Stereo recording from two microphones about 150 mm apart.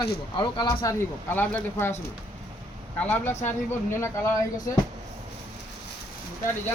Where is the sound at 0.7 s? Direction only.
15° left (ahead or behind).